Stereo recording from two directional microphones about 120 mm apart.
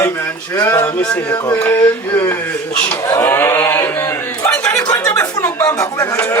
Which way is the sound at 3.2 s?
20° left (ahead or behind).